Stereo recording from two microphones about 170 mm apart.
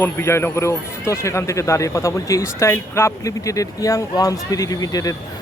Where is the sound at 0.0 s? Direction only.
15° left (ahead or behind).